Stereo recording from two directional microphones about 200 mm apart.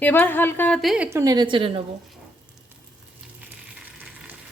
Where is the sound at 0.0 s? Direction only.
10° left (ahead or behind); by 1.8 s 25° right (ahead or behind).